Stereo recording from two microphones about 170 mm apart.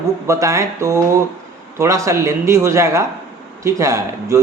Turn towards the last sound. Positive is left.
turn(degrees=-20)  # may be behind; listen again after turning